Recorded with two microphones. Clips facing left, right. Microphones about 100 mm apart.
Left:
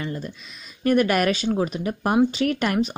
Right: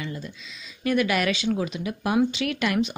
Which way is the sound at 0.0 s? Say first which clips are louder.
Left 4 dB; 45° left (ahead or behind).